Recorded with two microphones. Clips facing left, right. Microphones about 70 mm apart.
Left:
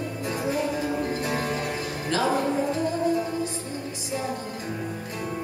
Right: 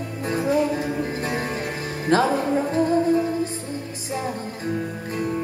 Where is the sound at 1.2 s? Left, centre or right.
Right.